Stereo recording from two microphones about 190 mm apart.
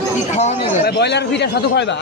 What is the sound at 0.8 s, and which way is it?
Speech, 60° left (ahead or behind).